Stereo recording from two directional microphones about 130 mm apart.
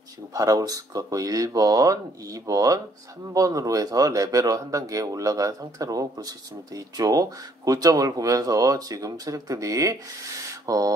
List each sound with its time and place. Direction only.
0.3 s speech: 25° right (ahead or behind)